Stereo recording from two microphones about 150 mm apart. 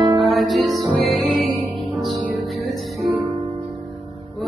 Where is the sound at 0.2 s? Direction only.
Centre (ahead or behind).